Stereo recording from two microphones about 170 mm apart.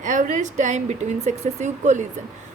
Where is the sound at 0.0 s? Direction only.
45° right (ahead or behind).